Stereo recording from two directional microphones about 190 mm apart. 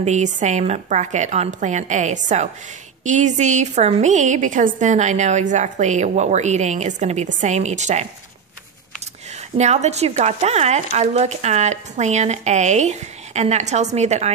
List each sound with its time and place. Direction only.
0.0 s speech: 40° right (ahead or behind)
9.6 s speech: 35° right (ahead or behind)